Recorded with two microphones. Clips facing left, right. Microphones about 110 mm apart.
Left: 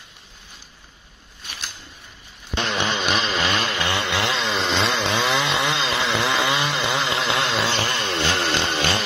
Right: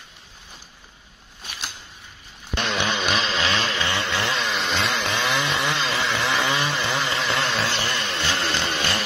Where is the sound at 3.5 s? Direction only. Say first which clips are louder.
Left 1 dB; 10° left (ahead or behind).